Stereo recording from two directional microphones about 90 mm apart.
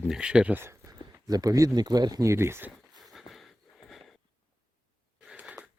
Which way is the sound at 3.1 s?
Centre (ahead or behind).